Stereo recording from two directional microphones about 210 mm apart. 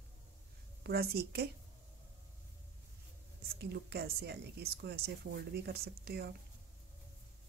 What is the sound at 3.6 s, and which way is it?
Speech, 50° right (ahead or behind).